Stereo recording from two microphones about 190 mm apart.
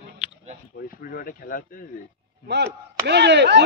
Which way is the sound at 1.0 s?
50° left (ahead or behind).